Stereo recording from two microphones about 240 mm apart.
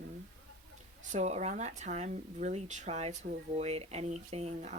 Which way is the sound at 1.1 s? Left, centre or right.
Right.